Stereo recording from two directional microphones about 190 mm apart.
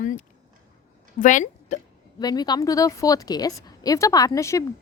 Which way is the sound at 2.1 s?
20° left (ahead or behind).